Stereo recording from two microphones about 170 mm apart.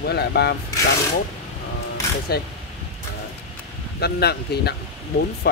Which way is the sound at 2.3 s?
70° left (ahead or behind).